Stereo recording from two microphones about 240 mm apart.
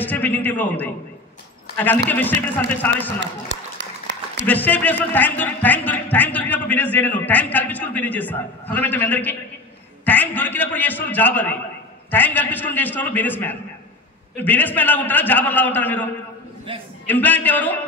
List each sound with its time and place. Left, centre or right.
0.0 s a man's voice: centre
2.0 s a man's voice: centre
3.2 s a sound: right
4.5 s a man's voice: centre